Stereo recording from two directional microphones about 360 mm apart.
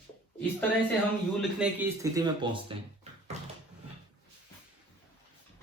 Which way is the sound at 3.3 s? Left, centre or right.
Centre.